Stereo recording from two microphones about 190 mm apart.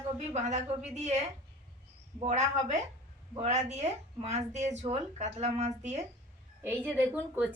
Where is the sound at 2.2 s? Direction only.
35° right (ahead or behind).